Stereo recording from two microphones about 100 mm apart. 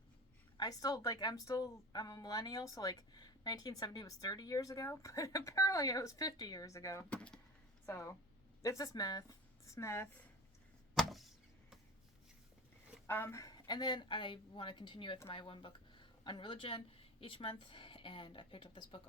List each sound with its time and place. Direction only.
0.5 s a woman's voice: 40° left (ahead or behind)
7.1 s speech: 10° left (ahead or behind)
7.9 s a woman's voice: 30° left (ahead or behind)
9.6 s a woman's voice: 30° left (ahead or behind)
11.0 s vehicle: 5° left (ahead or behind)
13.1 s a woman's voice: 25° left (ahead or behind); by 19.0 s 55° left (ahead or behind)